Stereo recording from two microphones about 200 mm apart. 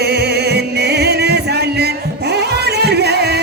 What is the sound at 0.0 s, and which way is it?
Music, 55° right (ahead or behind).